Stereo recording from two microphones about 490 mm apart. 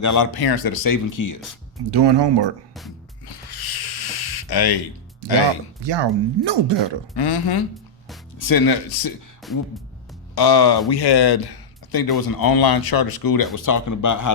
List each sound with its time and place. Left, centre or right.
0.0 s speech: left
1.9 s speech: right
3.2 s a sound: left
5.8 s speech: right
7.2 s speech: left
9.4 s music: centre
10.3 s speech: left